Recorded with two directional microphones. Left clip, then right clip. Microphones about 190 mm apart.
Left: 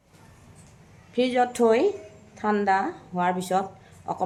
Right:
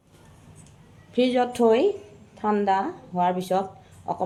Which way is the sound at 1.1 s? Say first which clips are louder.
Right 1 dB; 15° right (ahead or behind).